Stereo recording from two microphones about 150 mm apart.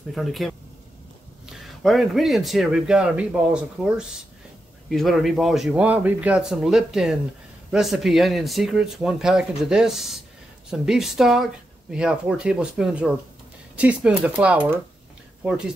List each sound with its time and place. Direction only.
0.1 s a man's voice: centre (ahead or behind)